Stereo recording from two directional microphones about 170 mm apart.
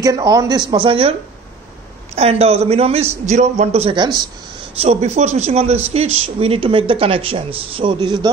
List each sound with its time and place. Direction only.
0.0 s speech: 20° right (ahead or behind)
2.1 s speech: 35° right (ahead or behind)
4.7 s speech: 40° right (ahead or behind); by 8.3 s 25° right (ahead or behind)